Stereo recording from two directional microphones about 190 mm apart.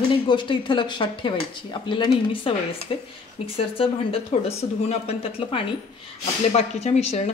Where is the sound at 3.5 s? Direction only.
30° left (ahead or behind).